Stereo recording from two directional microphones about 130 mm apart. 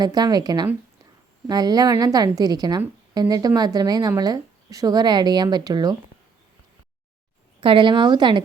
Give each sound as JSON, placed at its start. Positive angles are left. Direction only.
{"t": 0.0, "sound": "speech", "side_deg": -30}
{"t": 7.6, "sound": "speech", "side_deg": -40}